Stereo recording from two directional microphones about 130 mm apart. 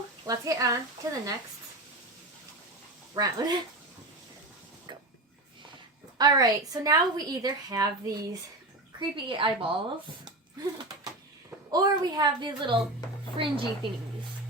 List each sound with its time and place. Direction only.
0.3 s a woman's voice: 25° right (ahead or behind)
3.2 s a woman's voice: 30° right (ahead or behind)
6.1 s a woman's voice: 30° right (ahead or behind)
9.0 s a woman's voice: 40° right (ahead or behind)
10.2 s a sound: 30° right (ahead or behind)
11.7 s a woman's voice: 30° right (ahead or behind)